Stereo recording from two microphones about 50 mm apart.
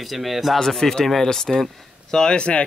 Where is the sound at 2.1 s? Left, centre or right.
Centre.